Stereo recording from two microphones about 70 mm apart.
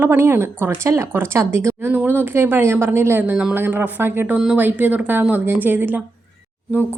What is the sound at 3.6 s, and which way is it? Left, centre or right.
Speech, right.